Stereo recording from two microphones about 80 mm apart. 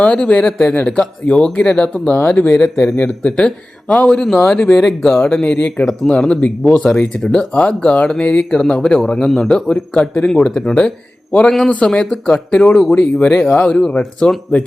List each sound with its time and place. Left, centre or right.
0.0 s speech: centre
2.6 s speech: centre
5.4 s speech: centre